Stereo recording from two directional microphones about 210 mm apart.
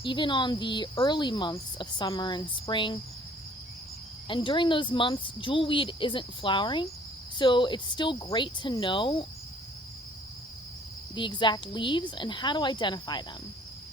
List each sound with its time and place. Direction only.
0.0 s speech: 20° left (ahead or behind)
4.3 s speech: 25° left (ahead or behind)
11.1 s speech: 20° left (ahead or behind)